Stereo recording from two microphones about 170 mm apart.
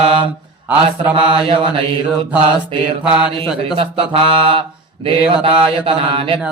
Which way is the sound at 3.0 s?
5° right (ahead or behind).